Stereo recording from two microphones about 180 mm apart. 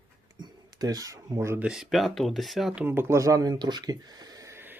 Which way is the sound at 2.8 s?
10° right (ahead or behind).